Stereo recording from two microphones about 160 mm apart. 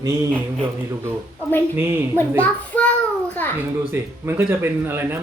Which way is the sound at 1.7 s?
15° right (ahead or behind).